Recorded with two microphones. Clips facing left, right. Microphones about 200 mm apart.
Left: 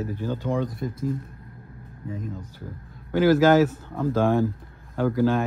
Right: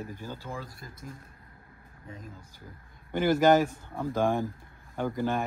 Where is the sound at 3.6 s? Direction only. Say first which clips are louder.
Left 7 dB; 15° right (ahead or behind).